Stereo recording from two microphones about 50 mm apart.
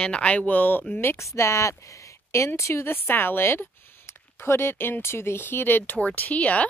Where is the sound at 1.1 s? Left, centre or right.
Left.